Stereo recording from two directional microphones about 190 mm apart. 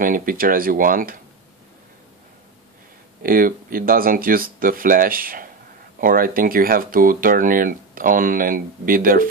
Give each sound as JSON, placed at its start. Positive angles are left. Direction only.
{"t": 0.0, "sound": "speech", "side_deg": -45}
{"t": 3.2, "sound": "speech", "side_deg": -45}